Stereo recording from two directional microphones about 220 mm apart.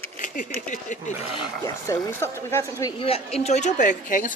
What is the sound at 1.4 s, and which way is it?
Speech, 15° left (ahead or behind).